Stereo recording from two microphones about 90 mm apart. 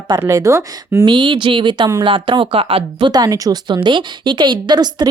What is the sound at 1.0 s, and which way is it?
A woman's voice, 60° right (ahead or behind).